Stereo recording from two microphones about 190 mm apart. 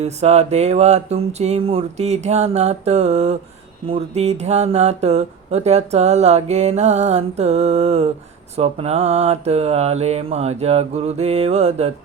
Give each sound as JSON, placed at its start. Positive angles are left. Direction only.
{"t": 0.0, "sound": "speech", "side_deg": -35}